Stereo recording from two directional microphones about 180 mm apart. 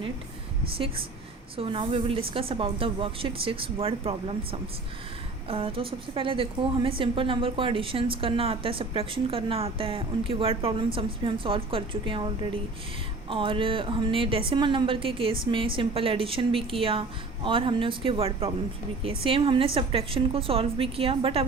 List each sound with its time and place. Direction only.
1.5 s a woman's voice: 30° right (ahead or behind)